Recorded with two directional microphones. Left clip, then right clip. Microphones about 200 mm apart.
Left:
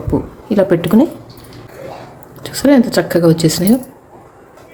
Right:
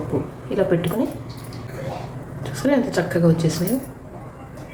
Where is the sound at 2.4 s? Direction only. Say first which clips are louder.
Left 9 dB; 50° left (ahead or behind).